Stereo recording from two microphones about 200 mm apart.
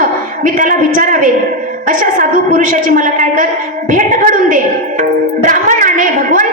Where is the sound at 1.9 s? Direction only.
45° right (ahead or behind).